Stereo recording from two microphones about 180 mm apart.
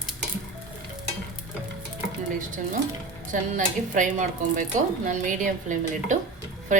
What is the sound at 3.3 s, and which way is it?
Speech, 45° right (ahead or behind).